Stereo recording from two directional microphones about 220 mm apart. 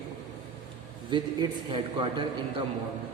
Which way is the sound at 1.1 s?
20° right (ahead or behind).